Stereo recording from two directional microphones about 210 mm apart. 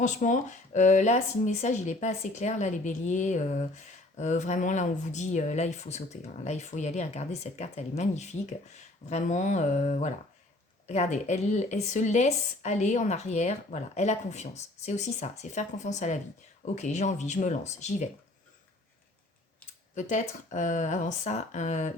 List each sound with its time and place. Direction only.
0.0 s speech: 35° left (ahead or behind)
20.0 s speech: 35° left (ahead or behind)